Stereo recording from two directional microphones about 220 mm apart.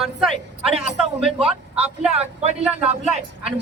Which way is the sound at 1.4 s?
25° right (ahead or behind).